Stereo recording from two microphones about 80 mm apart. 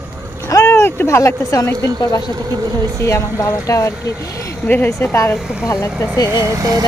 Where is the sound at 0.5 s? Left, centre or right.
Left.